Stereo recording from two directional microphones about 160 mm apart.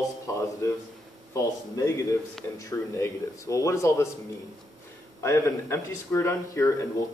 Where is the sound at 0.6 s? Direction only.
20° left (ahead or behind).